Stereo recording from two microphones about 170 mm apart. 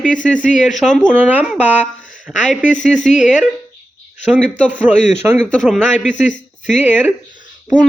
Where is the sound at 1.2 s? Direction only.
10° right (ahead or behind).